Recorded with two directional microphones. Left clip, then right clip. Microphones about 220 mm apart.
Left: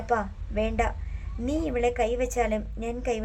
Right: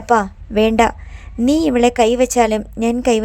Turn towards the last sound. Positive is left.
turn(degrees=-35)  # may be behind; listen again after turning